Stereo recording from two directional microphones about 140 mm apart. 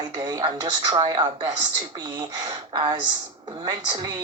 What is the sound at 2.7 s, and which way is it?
A woman's voice, 35° right (ahead or behind).